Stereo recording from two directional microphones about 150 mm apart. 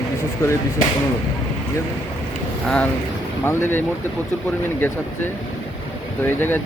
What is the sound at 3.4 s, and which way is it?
Speech, 15° left (ahead or behind).